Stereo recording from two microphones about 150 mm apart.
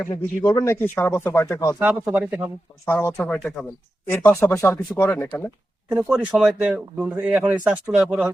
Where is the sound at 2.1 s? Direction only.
10° right (ahead or behind).